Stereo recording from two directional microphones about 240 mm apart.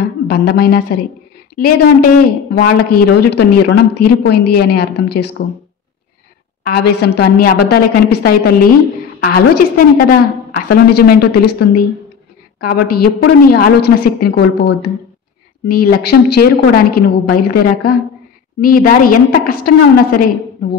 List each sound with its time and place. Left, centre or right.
0.3 s speech: left
6.6 s speech: left
12.8 s speech: left
16.1 s speech: left